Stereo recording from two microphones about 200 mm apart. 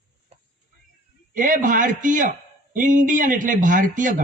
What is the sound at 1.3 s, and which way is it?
A man's voice, 40° right (ahead or behind).